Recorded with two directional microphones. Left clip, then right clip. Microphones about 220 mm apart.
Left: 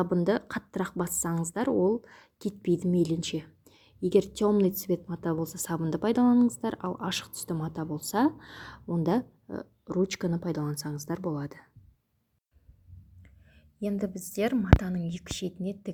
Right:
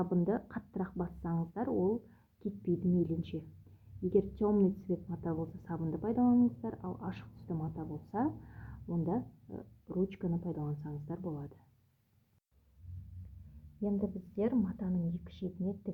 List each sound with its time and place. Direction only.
0.0 s a woman's voice: 30° left (ahead or behind)
13.8 s speech: 25° left (ahead or behind)